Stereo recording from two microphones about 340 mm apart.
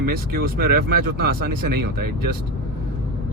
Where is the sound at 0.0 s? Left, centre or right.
Right.